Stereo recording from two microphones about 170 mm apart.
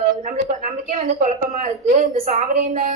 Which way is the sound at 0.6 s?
50° right (ahead or behind).